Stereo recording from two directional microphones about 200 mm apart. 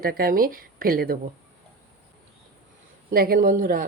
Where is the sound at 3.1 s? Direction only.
50° right (ahead or behind).